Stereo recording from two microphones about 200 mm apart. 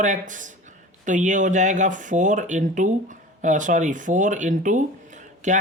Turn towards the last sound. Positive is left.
turn(degrees=-40)  # may be behind; listen again after turning